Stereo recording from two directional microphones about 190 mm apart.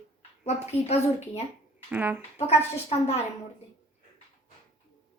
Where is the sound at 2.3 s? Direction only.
35° left (ahead or behind).